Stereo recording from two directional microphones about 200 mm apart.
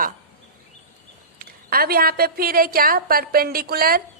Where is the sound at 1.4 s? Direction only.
50° right (ahead or behind).